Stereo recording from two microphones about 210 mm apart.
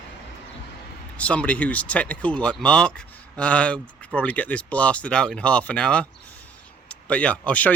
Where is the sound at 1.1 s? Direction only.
5° left (ahead or behind).